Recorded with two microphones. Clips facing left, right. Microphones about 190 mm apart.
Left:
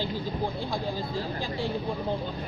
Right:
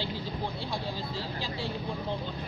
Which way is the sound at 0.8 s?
50° left (ahead or behind).